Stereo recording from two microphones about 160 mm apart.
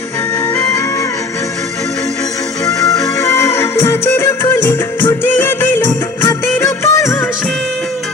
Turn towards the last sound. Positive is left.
turn(degrees=10)  # may be behind; listen again after turning